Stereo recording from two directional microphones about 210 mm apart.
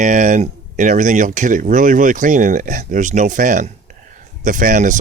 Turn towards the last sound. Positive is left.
turn(degrees=-35)  # may be behind; listen again after turning